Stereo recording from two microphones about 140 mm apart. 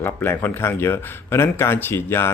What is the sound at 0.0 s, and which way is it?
Speech, 15° left (ahead or behind).